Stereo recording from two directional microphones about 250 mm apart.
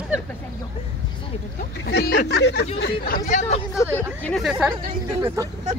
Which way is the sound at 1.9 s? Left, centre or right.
Left.